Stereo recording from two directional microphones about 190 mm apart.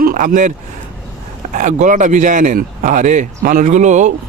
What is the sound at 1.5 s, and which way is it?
Speech, 40° right (ahead or behind).